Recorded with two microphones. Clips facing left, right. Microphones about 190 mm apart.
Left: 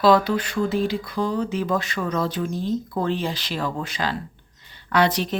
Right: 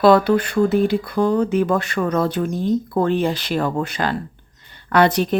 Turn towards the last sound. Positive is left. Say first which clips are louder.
# right 5 dB
turn(degrees=-55)  # may be behind; listen again after turning